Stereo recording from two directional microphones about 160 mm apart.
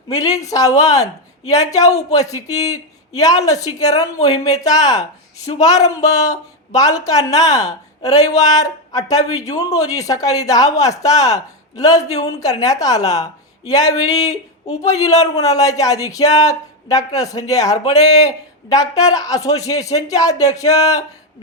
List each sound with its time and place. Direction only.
0.1 s speech: 20° left (ahead or behind)